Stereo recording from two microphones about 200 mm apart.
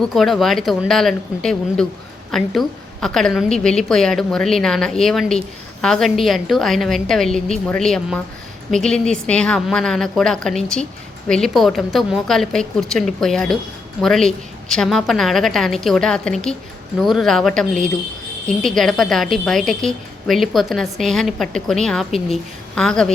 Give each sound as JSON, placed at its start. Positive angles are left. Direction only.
{"t": 0.0, "sound": "a woman's voice", "side_deg": 0}